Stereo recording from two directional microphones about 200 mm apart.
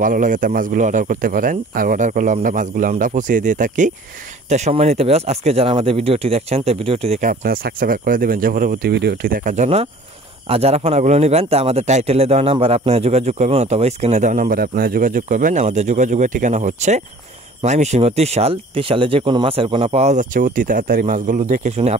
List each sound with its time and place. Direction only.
0.0 s a man's voice: 40° right (ahead or behind)